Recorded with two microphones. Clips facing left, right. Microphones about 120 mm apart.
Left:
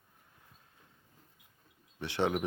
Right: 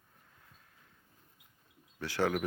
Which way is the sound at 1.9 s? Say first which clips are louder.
Even; 25° left (ahead or behind).